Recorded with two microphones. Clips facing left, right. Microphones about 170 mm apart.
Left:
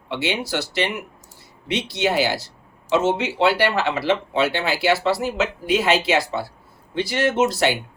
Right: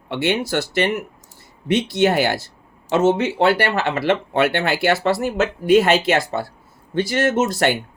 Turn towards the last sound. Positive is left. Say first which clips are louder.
# right 1 dB
turn(degrees=-50)  # may be behind; listen again after turning